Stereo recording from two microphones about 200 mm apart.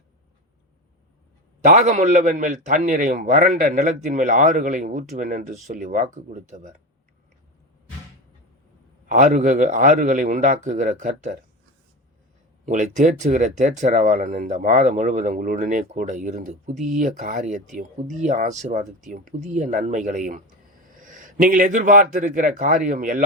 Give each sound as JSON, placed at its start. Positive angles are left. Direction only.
{"t": 1.6, "sound": "speech", "side_deg": -35}
{"t": 9.0, "sound": "speech", "side_deg": -40}
{"t": 12.6, "sound": "a man's voice", "side_deg": -40}